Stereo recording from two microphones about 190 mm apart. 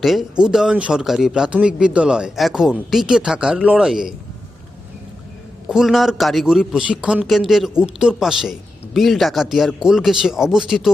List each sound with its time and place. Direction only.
0.0 s a man's voice: centre (ahead or behind)
5.6 s a man's voice: centre (ahead or behind)